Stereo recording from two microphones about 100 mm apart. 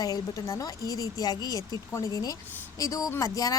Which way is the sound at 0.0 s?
40° left (ahead or behind).